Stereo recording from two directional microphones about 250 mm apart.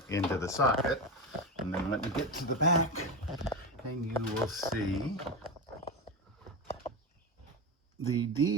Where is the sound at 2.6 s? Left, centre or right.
Left.